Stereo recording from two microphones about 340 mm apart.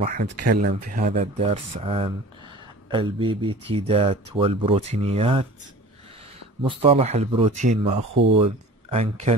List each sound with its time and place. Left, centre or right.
0.0 s speech: right
6.8 s speech: centre